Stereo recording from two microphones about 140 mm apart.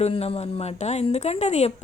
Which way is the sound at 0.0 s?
45° left (ahead or behind).